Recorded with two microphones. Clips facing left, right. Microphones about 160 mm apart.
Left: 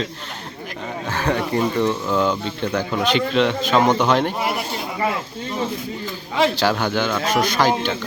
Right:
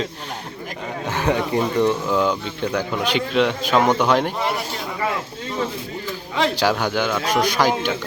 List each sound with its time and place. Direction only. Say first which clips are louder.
1.1 s a sound: right 1 dB; 15° right (ahead or behind)
1.5 s a man's voice: right 1 dB; 15° right (ahead or behind)
2.0 s a man's voice: even; centre (ahead or behind)
6.6 s a man's voice: even; 10° right (ahead or behind)